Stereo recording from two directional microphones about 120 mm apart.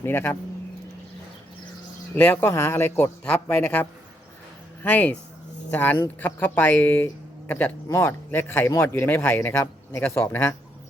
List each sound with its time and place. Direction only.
0.0 s speech: 15° left (ahead or behind)
2.1 s speech: 15° left (ahead or behind)